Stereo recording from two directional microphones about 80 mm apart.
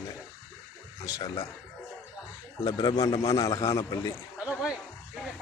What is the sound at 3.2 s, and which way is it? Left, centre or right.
Speech, left.